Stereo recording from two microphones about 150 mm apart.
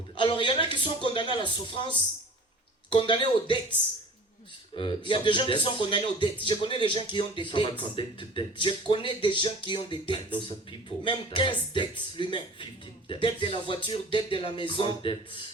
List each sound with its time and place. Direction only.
0.2 s speech: 35° left (ahead or behind)
4.8 s speech: 35° left (ahead or behind)